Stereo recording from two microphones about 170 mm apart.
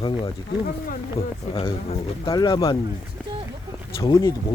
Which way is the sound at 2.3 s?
25° left (ahead or behind).